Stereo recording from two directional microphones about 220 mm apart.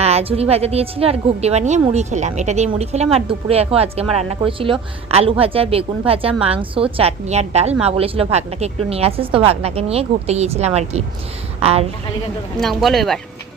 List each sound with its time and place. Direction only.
0.0 s a woman's voice: 30° right (ahead or behind)
12.5 s speech: centre (ahead or behind)